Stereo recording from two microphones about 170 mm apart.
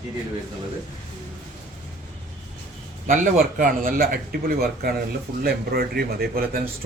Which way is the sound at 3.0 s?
50° right (ahead or behind).